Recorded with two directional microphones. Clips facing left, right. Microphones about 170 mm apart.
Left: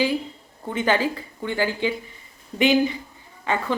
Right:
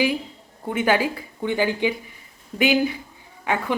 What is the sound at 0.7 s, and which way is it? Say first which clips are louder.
Speech: right 1 dB; 10° right (ahead or behind).